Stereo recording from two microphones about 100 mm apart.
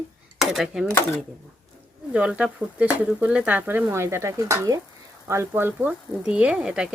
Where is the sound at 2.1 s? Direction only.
10° right (ahead or behind).